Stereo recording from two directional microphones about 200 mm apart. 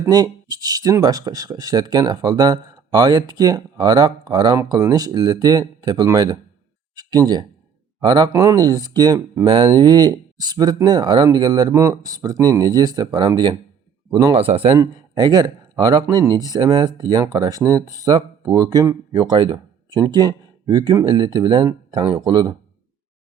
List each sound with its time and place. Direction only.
0.0 s speech: 20° right (ahead or behind)
14.3 s speech: 30° right (ahead or behind)